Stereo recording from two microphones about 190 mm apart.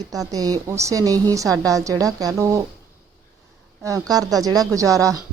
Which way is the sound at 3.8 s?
15° right (ahead or behind).